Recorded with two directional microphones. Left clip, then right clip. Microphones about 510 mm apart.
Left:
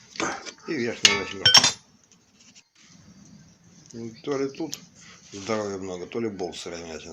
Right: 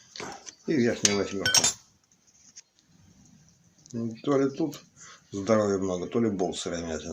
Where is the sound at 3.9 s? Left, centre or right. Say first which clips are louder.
Right 3 dB; left.